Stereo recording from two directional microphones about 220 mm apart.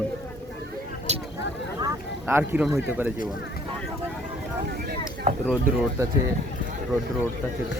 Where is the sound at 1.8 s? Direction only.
10° right (ahead or behind).